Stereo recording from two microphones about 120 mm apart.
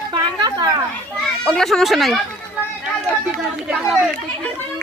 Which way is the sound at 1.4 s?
5° left (ahead or behind).